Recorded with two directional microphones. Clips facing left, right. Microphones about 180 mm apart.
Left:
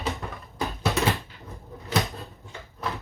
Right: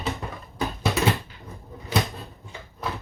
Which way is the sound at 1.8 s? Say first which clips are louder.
Right 1 dB; 15° right (ahead or behind).